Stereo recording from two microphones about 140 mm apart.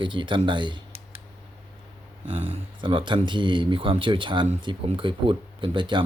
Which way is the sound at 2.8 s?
35° right (ahead or behind).